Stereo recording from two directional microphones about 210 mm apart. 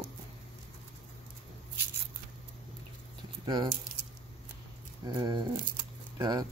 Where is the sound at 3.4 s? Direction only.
20° right (ahead or behind).